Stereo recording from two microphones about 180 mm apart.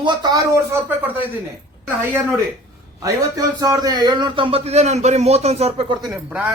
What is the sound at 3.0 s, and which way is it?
Speech, 20° right (ahead or behind).